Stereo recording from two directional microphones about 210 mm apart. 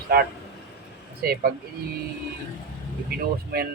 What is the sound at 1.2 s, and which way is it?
Speech, 45° right (ahead or behind).